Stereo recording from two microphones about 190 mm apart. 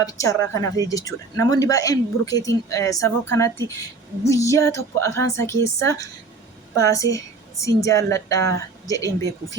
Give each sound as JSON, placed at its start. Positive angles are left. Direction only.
{"t": 0.0, "sound": "a woman's voice", "side_deg": 15}